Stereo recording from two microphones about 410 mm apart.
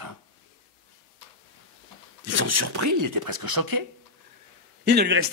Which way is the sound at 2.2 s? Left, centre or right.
Right.